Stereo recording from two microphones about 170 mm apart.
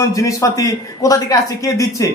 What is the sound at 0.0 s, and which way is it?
A man's voice, 20° left (ahead or behind).